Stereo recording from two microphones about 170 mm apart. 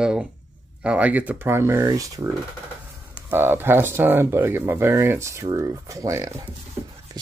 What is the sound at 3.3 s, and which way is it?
Speech, 10° right (ahead or behind).